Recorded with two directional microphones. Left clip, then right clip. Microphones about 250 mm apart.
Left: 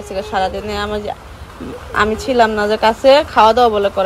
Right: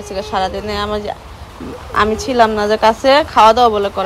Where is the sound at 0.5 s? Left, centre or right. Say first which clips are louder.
Right 1 dB; right.